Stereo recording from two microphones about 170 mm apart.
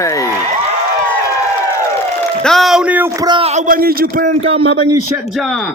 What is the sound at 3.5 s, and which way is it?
Speech, 50° right (ahead or behind).